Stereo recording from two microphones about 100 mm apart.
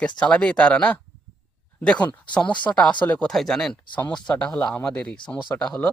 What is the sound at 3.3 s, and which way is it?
Speech, 5° left (ahead or behind).